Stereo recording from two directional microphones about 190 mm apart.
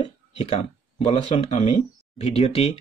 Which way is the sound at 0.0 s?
35° left (ahead or behind).